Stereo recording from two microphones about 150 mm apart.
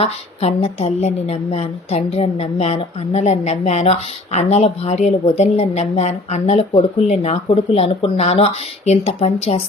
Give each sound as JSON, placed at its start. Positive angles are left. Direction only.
{"t": 0.0, "sound": "a woman's voice", "side_deg": 40}